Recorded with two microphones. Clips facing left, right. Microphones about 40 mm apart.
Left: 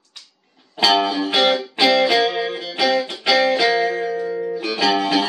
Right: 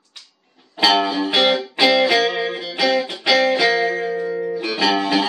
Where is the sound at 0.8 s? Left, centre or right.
Centre.